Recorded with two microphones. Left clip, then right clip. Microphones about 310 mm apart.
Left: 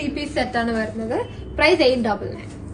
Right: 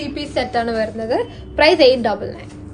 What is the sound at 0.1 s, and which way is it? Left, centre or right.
A woman's voice, centre.